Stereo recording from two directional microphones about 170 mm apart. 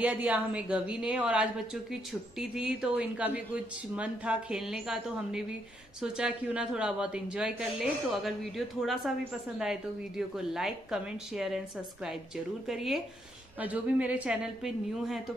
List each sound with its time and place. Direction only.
0.0 s a woman's voice: 10° right (ahead or behind)